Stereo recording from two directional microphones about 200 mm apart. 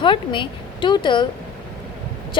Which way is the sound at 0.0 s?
25° left (ahead or behind).